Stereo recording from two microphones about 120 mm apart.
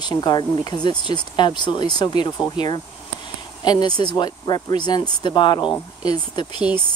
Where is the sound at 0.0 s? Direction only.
35° left (ahead or behind).